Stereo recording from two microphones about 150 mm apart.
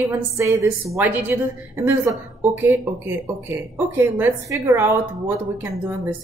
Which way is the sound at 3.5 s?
15° right (ahead or behind).